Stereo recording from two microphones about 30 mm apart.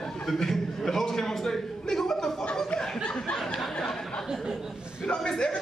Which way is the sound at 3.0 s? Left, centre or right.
Left.